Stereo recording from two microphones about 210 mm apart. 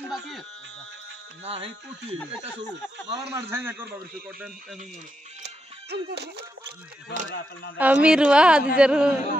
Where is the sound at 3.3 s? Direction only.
10° right (ahead or behind).